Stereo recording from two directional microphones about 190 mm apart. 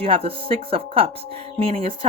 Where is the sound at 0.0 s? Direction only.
30° right (ahead or behind).